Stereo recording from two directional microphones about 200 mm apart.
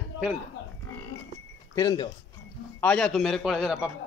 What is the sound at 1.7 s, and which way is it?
Speech, 20° left (ahead or behind).